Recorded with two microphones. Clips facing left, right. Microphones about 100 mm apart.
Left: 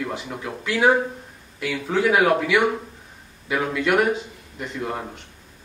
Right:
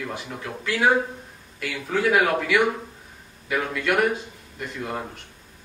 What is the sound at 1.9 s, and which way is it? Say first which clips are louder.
A man's voice: left 2 dB; 20° left (ahead or behind).